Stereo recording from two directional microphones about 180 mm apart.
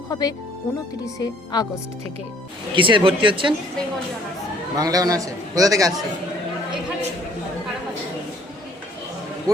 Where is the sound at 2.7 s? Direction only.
25° right (ahead or behind).